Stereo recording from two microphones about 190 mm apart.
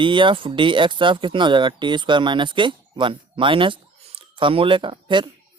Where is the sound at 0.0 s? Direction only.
25° right (ahead or behind).